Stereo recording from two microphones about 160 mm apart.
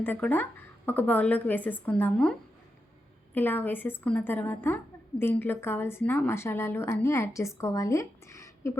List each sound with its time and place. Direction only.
0.0 s a woman's voice: 10° left (ahead or behind)
3.3 s a woman's voice: 10° left (ahead or behind)